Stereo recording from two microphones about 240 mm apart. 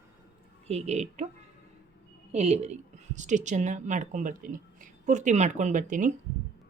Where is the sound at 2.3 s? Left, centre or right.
Right.